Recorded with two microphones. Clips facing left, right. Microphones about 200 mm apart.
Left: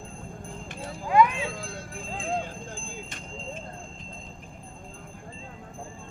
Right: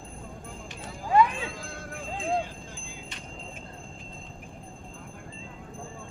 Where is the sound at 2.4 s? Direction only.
50° left (ahead or behind).